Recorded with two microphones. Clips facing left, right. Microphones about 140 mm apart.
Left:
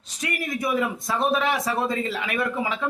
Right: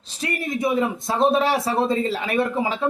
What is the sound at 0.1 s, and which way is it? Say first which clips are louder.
A man's voice: right 3 dB; 30° right (ahead or behind).